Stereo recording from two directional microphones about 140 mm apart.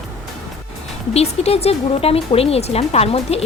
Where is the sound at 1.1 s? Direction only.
45° left (ahead or behind).